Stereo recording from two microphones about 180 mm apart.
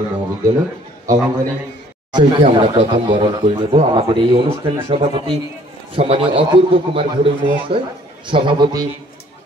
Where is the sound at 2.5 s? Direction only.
30° right (ahead or behind).